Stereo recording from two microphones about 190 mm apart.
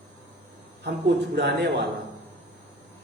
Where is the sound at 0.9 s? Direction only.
60° right (ahead or behind).